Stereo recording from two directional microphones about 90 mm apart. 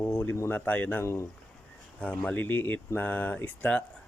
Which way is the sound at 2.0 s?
15° left (ahead or behind).